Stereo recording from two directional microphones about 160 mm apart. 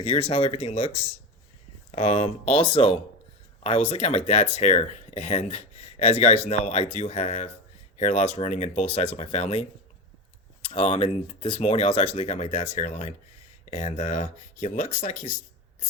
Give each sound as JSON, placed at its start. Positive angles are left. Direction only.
{"t": 0.0, "sound": "speech", "side_deg": 35}